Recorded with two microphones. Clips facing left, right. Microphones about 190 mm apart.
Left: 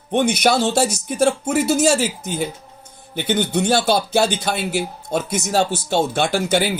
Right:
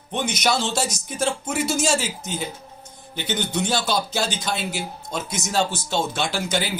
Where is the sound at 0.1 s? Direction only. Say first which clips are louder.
Left 6 dB; 55° left (ahead or behind).